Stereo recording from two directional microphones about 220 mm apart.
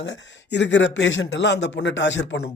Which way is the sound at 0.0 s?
55° left (ahead or behind).